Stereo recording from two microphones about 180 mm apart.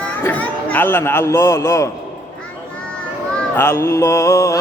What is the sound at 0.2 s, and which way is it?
A man's voice, 10° left (ahead or behind).